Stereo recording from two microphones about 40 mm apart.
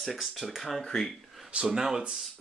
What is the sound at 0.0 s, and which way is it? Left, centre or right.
Speech, centre.